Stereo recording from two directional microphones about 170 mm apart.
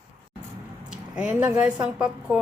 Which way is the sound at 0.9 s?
5° right (ahead or behind).